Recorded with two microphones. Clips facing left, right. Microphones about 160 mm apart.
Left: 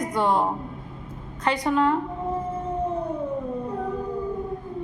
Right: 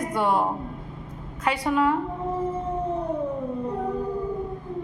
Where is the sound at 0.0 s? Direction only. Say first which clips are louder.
Left 1 dB; 5° right (ahead or behind).